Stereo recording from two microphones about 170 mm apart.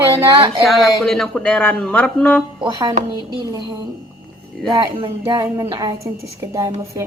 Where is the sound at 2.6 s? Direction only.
25° right (ahead or behind).